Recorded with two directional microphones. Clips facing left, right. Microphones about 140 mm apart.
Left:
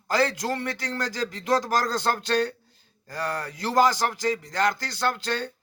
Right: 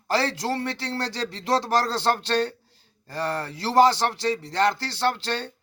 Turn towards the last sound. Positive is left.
turn(degrees=-30)  # may be behind; listen again after turning